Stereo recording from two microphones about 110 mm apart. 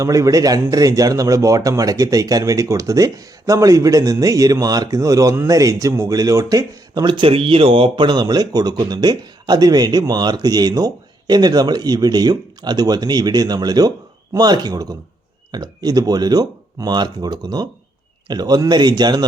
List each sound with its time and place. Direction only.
0.0 s a man's voice: 30° right (ahead or behind)